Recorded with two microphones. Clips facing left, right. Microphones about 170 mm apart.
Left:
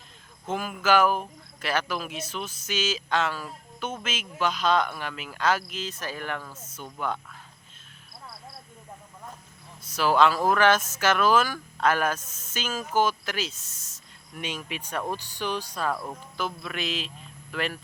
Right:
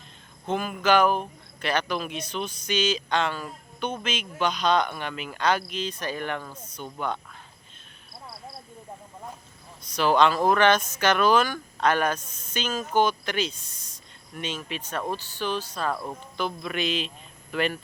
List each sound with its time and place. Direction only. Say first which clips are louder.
0.4 s speech: right 2 dB; 5° left (ahead or behind)
9.8 s speech: right 1 dB; 5° left (ahead or behind)